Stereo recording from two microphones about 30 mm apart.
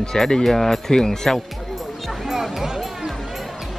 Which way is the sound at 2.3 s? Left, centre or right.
Centre.